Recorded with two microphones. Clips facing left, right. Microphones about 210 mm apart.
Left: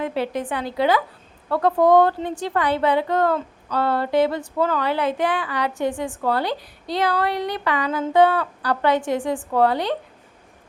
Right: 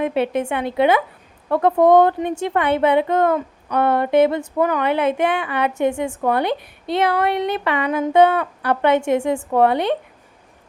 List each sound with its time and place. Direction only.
0.0 s a woman's voice: 20° right (ahead or behind)